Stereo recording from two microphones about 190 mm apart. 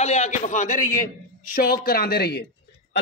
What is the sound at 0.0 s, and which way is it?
A man's voice, 35° left (ahead or behind).